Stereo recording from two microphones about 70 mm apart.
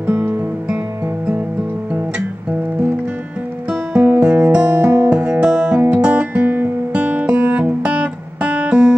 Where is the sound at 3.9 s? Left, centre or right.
Centre.